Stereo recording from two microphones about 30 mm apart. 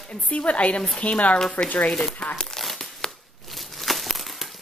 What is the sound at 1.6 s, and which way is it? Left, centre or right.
Speech, left.